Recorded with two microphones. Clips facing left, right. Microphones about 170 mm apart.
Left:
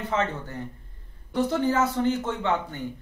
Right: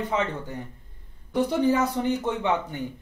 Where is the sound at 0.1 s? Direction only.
15° right (ahead or behind).